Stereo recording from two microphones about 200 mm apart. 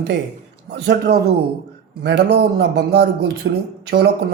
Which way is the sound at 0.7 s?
55° right (ahead or behind).